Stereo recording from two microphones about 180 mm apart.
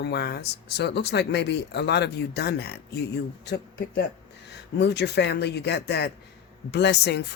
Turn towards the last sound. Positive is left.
turn(degrees=65)  # may be behind; listen again after turning